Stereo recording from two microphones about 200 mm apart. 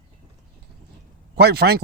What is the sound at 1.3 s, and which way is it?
Speech, 55° right (ahead or behind).